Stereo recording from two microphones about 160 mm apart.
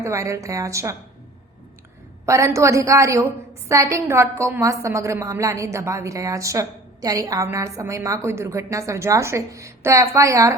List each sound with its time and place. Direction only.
0.0 s a woman's voice: 20° right (ahead or behind)
2.2 s a woman's voice: 20° right (ahead or behind)